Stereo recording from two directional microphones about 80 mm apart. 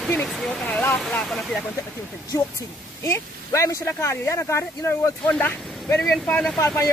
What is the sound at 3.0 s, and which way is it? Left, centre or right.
Speech, left.